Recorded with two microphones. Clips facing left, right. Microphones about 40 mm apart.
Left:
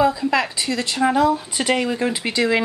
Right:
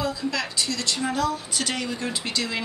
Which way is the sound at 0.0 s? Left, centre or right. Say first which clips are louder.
Left 9 dB; left.